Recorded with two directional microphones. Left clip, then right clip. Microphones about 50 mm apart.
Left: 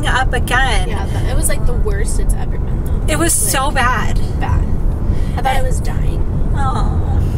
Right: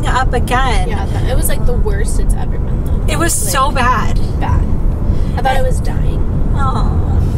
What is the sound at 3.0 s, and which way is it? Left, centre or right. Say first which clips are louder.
A woman's voice: even; left.